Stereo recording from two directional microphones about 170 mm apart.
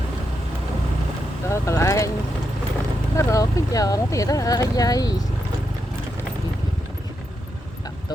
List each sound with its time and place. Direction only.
1.5 s speech: 15° left (ahead or behind)
3.2 s speech: 20° left (ahead or behind)